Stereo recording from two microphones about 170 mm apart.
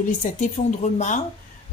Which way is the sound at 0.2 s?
45° left (ahead or behind).